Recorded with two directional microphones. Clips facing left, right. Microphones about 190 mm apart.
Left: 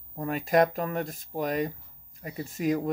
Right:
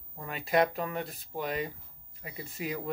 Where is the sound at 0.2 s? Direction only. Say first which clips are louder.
Left 4 dB; 45° left (ahead or behind).